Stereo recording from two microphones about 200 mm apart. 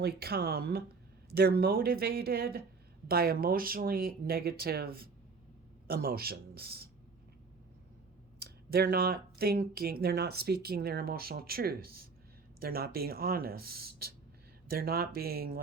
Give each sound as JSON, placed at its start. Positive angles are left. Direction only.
{"t": 0.0, "sound": "speech", "side_deg": -50}
{"t": 8.4, "sound": "speech", "side_deg": -50}